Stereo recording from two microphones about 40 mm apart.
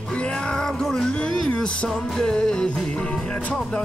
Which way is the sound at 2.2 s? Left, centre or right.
Centre.